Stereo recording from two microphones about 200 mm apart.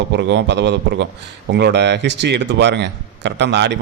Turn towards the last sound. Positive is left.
turn(degrees=-60)  # may be behind; listen again after turning